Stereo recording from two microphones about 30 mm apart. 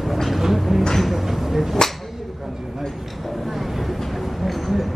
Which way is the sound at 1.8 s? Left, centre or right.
Left.